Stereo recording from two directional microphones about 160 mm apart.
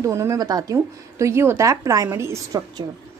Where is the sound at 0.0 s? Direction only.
20° right (ahead or behind).